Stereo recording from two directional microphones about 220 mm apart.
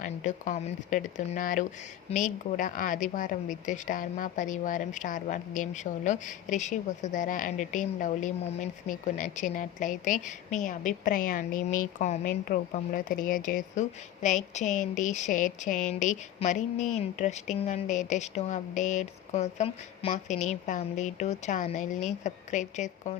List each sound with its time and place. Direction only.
0.0 s a woman's voice: 35° left (ahead or behind)